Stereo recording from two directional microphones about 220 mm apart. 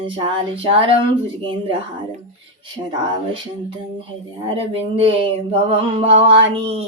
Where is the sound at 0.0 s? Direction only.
25° right (ahead or behind).